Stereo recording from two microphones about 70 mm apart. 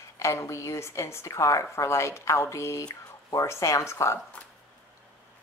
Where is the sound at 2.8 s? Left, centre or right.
Left.